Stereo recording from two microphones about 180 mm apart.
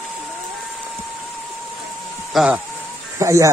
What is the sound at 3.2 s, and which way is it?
Speech, 15° right (ahead or behind).